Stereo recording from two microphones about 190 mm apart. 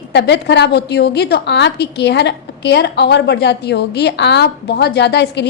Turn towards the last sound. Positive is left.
turn(degrees=65)  # may be behind; listen again after turning